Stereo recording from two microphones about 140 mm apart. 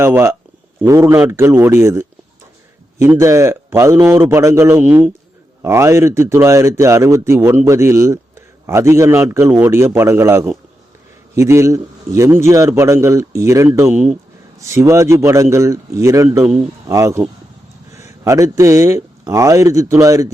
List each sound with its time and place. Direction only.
0.0 s a man's voice: 20° right (ahead or behind)